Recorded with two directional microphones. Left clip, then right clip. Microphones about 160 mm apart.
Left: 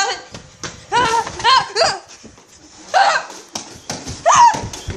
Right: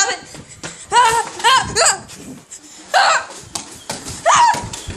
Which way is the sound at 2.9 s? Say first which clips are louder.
Even; 15° right (ahead or behind).